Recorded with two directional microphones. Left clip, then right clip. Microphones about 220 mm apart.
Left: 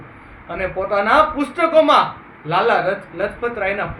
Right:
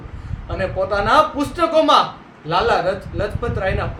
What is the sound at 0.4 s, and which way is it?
A man's voice, 15° right (ahead or behind).